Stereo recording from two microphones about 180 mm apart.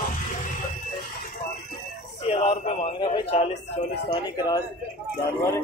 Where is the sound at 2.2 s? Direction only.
35° left (ahead or behind).